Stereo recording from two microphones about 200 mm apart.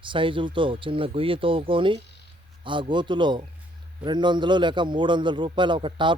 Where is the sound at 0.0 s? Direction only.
25° right (ahead or behind).